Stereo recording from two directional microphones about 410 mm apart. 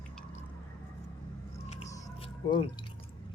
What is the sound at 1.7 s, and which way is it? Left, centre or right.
Music, centre.